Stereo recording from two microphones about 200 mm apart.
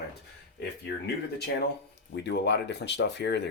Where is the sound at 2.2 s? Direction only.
60° left (ahead or behind).